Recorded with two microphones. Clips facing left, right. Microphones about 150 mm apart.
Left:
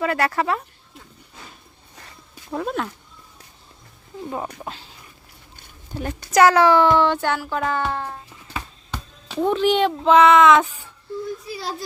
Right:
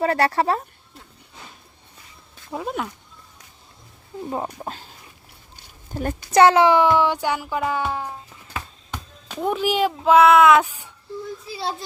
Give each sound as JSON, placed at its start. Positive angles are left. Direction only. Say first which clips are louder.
{"t": 0.0, "sound": "speech", "louder": "right 2 dB", "side_deg": -35}
{"t": 2.5, "sound": "speech", "louder": "left 2 dB", "side_deg": -10}
{"t": 4.3, "sound": "speech", "louder": "right 1 dB", "side_deg": -25}
{"t": 5.9, "sound": "a child's voice", "louder": "right 2 dB", "side_deg": -45}
{"t": 6.3, "sound": "speech", "louder": "even", "side_deg": -25}
{"t": 11.4, "sound": "a child's voice", "louder": "right 2 dB", "side_deg": -25}